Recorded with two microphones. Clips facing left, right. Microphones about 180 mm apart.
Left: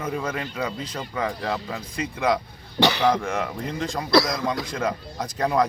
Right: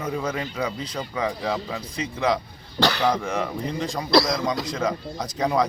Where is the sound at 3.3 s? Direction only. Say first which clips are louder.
Right 1 dB; 5° left (ahead or behind).